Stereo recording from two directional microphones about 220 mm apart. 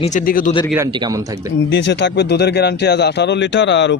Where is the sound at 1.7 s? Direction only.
55° left (ahead or behind).